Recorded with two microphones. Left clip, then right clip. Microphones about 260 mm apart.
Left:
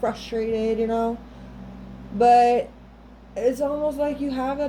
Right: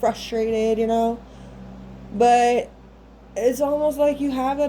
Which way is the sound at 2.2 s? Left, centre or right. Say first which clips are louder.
Even; right.